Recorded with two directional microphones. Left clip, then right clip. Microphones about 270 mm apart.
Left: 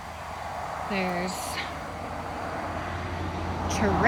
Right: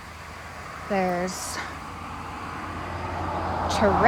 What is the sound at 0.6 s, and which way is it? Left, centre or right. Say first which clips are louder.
Speech: right 5 dB; centre.